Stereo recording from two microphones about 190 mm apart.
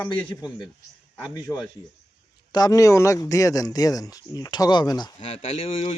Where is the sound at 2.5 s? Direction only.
20° left (ahead or behind).